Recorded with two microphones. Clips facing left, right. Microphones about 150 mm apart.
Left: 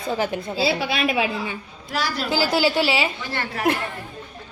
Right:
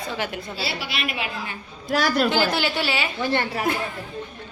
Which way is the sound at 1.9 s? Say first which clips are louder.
Right 5 dB; 50° right (ahead or behind).